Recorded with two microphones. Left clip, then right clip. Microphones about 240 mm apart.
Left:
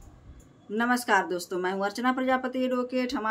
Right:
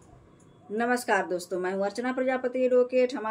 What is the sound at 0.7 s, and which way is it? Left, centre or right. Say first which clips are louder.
Speech: left 1 dB; centre.